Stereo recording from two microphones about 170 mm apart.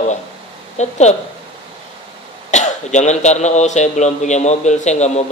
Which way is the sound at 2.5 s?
45° left (ahead or behind).